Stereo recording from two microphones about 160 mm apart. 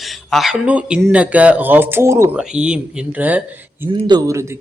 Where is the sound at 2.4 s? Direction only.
5° right (ahead or behind).